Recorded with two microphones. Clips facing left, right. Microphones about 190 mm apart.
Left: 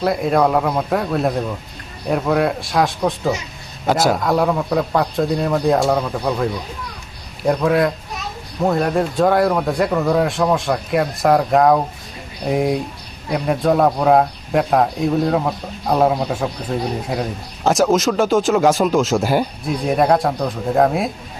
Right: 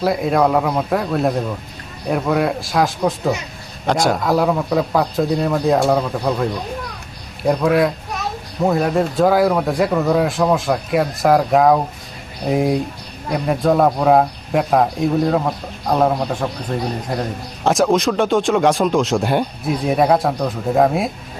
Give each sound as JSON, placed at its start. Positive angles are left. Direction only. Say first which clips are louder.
{"t": 0.0, "sound": "speech", "louder": "even", "side_deg": 0}